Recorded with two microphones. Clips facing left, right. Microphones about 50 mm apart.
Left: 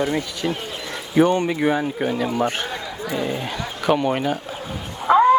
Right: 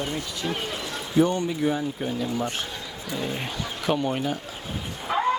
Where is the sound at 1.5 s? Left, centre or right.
Left.